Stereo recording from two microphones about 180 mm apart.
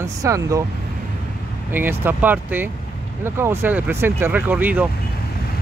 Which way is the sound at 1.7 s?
10° right (ahead or behind).